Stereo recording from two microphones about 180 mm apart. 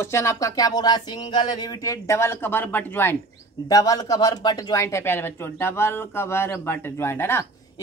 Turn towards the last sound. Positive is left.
turn(degrees=10)  # may be behind; listen again after turning